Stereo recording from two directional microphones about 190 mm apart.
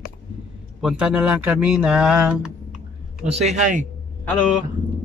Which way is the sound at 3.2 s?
35° right (ahead or behind).